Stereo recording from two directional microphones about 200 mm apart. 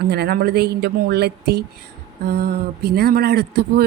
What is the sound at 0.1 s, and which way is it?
Speech, 55° right (ahead or behind).